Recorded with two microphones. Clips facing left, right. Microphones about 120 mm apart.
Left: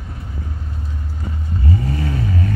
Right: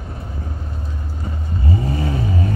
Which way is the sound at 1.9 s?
20° right (ahead or behind).